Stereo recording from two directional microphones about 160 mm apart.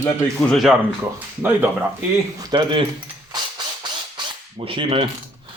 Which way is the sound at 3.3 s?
30° right (ahead or behind).